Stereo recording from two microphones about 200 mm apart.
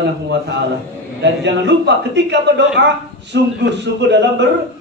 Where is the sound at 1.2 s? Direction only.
60° right (ahead or behind).